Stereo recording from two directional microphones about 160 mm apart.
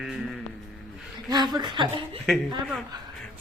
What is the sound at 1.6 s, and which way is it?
Speech, 30° right (ahead or behind).